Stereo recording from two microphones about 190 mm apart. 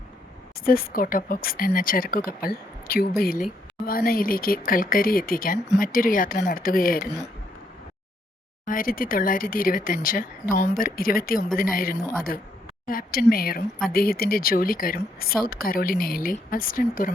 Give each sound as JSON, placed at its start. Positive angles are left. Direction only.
{"t": 0.6, "sound": "speech", "side_deg": 50}
{"t": 8.6, "sound": "speech", "side_deg": 45}